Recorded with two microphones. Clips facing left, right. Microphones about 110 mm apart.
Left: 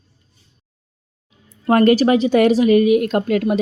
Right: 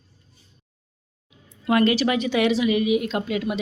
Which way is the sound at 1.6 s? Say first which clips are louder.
Left 6 dB; 45° left (ahead or behind).